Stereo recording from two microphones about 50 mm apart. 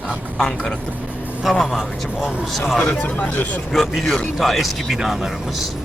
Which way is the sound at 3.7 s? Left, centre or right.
Centre.